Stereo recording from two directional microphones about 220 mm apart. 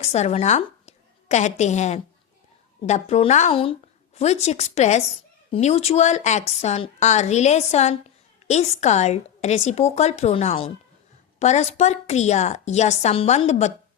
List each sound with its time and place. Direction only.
0.0 s a woman's voice: 30° left (ahead or behind)